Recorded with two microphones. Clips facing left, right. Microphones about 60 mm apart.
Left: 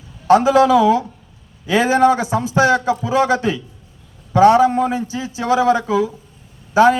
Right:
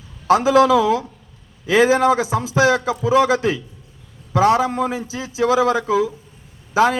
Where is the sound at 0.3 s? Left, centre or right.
Centre.